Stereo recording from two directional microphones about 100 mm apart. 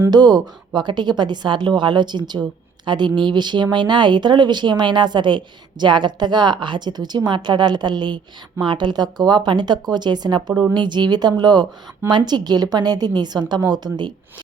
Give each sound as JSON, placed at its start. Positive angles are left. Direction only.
{"t": 0.1, "sound": "speech", "side_deg": -45}